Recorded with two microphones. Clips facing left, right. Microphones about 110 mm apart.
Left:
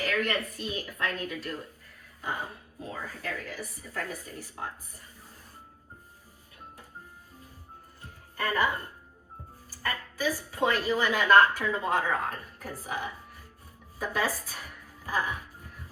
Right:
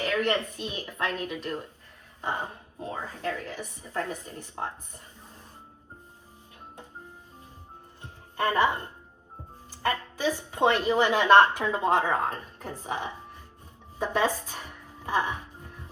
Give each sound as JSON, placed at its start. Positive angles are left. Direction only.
{"t": 0.0, "sound": "a woman's voice", "side_deg": -25}
{"t": 8.0, "sound": "music", "side_deg": -25}
{"t": 9.6, "sound": "a woman's voice", "side_deg": -25}
{"t": 14.0, "sound": "a sound", "side_deg": -25}